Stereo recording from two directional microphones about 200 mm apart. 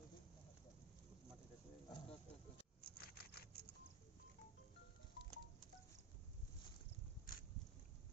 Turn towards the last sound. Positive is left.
turn(degrees=45)  # may be behind; listen again after turning